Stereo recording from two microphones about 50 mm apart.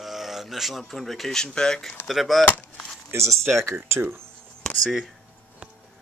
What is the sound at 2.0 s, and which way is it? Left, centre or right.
Speech, centre.